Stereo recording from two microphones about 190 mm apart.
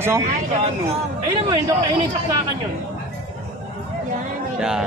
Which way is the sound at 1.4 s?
20° right (ahead or behind).